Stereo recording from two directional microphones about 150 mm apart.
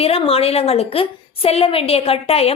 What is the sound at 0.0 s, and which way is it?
A woman's voice, 40° left (ahead or behind).